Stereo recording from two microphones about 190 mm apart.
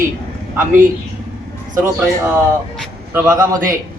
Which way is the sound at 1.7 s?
15° right (ahead or behind).